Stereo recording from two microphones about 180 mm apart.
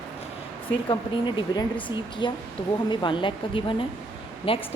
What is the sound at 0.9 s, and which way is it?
A woman's voice, 25° left (ahead or behind).